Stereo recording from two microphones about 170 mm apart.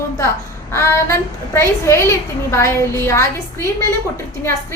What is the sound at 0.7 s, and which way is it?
A woman's voice, 15° left (ahead or behind).